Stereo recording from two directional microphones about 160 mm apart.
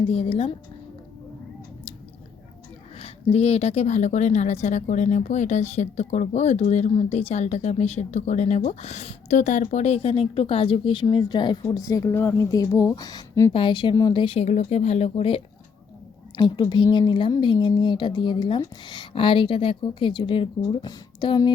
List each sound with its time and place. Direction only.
0.1 s speech: 40° left (ahead or behind)
3.0 s a woman's voice: 40° left (ahead or behind)